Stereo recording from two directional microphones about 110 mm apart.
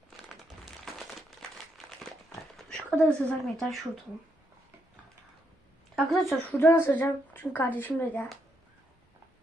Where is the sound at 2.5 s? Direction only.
5° left (ahead or behind).